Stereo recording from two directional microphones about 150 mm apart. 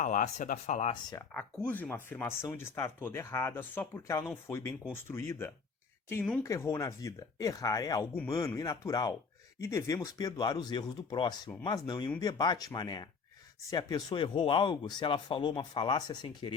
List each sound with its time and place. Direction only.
0.0 s speech: 55° left (ahead or behind)
1.3 s speech: 5° left (ahead or behind)
6.4 s speech: 20° left (ahead or behind)